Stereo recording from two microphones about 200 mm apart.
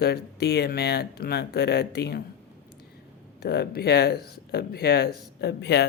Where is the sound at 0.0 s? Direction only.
55° left (ahead or behind).